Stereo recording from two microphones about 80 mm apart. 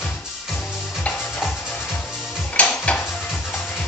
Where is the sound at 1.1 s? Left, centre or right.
Centre.